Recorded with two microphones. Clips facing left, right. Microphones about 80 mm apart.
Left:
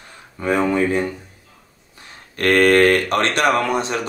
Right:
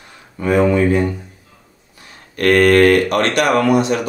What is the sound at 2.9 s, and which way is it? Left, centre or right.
Speech, left.